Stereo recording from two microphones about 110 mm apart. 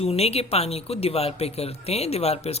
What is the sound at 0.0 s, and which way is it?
Speech, 65° left (ahead or behind).